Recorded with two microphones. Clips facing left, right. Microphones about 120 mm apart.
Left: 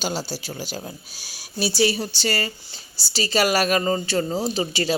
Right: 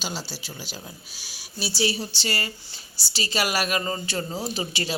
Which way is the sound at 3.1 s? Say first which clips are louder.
Left 6 dB; 35° left (ahead or behind).